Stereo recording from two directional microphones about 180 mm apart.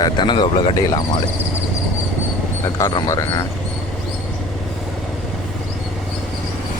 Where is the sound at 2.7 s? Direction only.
15° left (ahead or behind).